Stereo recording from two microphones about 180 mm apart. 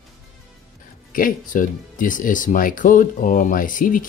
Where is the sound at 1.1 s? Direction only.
50° left (ahead or behind).